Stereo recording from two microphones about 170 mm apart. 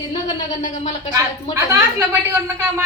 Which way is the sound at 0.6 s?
45° left (ahead or behind).